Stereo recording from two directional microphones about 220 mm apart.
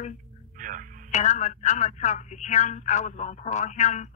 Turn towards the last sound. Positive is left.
turn(degrees=35)  # may be behind; listen again after turning